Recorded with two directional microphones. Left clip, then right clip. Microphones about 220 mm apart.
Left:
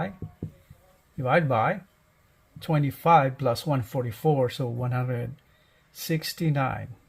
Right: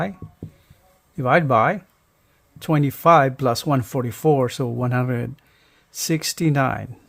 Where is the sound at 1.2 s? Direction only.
40° right (ahead or behind).